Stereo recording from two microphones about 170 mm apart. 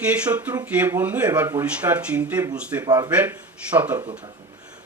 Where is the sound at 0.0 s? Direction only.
10° right (ahead or behind).